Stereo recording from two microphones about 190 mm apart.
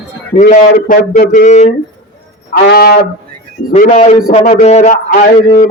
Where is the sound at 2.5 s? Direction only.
55° left (ahead or behind).